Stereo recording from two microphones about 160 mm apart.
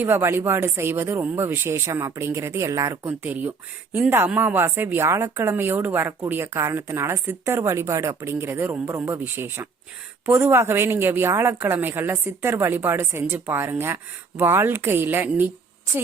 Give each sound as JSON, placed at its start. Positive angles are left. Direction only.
{"t": 0.0, "sound": "a woman's voice", "side_deg": -15}